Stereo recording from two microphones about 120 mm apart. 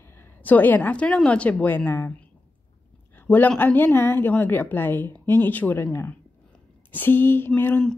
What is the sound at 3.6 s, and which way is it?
A woman's voice, 15° left (ahead or behind).